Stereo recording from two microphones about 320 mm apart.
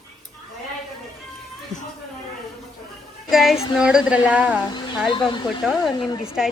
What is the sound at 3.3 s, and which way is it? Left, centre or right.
A woman's voice, centre.